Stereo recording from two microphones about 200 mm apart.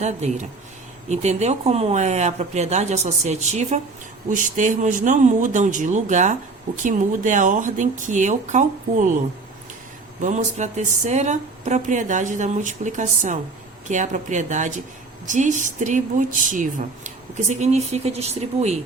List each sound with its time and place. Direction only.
0.0 s speech: 35° right (ahead or behind)
10.2 s speech: 35° right (ahead or behind)